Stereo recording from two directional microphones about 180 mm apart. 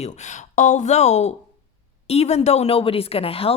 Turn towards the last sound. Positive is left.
turn(degrees=30)  # may be behind; listen again after turning